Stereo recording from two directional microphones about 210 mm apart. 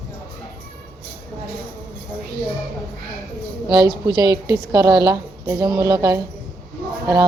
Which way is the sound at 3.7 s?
20° right (ahead or behind).